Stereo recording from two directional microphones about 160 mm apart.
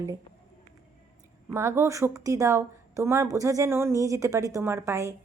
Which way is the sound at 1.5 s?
15° right (ahead or behind).